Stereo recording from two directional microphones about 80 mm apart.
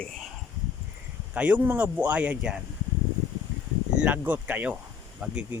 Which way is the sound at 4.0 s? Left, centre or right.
Centre.